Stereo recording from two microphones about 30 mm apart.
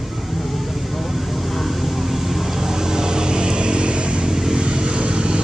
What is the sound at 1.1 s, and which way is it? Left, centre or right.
Vehicle, centre.